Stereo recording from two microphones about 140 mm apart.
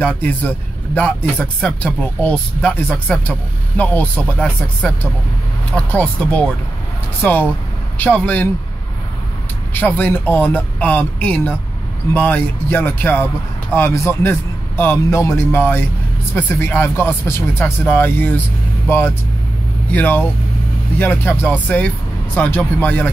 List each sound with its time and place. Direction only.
0.0 s speech: 10° left (ahead or behind)
9.8 s speech: 15° left (ahead or behind)